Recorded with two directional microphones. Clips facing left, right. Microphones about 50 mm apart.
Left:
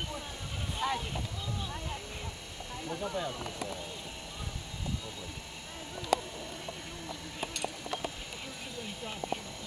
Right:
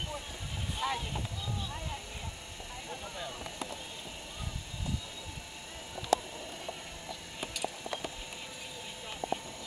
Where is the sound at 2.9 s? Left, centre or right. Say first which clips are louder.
Left 7 dB; centre.